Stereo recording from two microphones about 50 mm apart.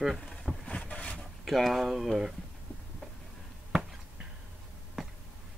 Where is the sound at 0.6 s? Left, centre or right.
Left.